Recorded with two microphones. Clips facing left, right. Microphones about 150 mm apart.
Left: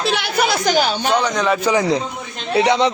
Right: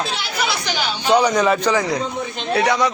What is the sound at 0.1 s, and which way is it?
Speech, 60° left (ahead or behind).